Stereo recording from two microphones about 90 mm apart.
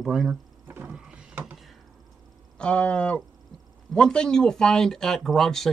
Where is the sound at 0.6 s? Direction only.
20° right (ahead or behind).